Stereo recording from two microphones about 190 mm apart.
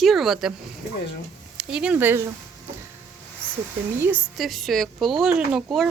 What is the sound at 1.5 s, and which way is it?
Speech, 5° right (ahead or behind).